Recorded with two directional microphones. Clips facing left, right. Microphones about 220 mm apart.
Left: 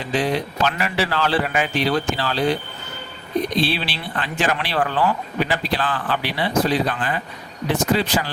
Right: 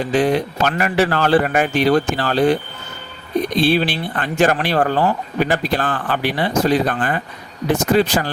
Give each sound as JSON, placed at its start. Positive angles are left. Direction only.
{"t": 0.0, "sound": "speech", "side_deg": -50}
{"t": 3.6, "sound": "speech", "side_deg": -45}